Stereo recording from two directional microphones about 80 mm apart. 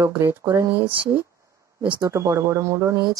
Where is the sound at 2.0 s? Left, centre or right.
Right.